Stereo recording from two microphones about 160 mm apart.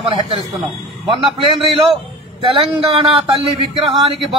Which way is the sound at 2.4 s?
35° right (ahead or behind).